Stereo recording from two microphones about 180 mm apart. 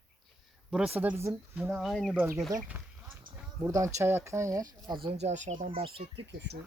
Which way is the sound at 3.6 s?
20° right (ahead or behind).